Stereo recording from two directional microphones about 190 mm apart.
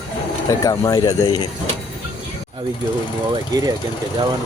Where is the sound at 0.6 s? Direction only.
20° left (ahead or behind).